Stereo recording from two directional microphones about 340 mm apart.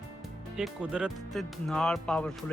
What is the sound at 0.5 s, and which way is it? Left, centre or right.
Speech, centre.